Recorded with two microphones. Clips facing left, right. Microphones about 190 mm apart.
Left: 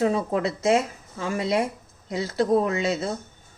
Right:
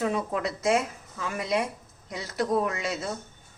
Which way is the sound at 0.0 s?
30° left (ahead or behind).